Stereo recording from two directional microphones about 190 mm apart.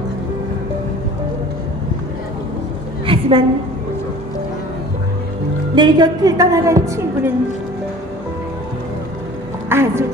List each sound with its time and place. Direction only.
3.1 s a sound: 30° right (ahead or behind)
5.8 s a woman's voice: 20° right (ahead or behind)
9.7 s a woman's voice: 10° right (ahead or behind)